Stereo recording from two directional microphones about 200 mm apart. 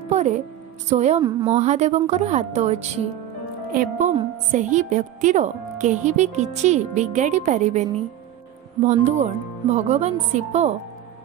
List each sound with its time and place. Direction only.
0.1 s music: 35° right (ahead or behind)
0.8 s speech: 35° right (ahead or behind)
3.7 s speech: 45° right (ahead or behind)
8.8 s speech: 35° right (ahead or behind)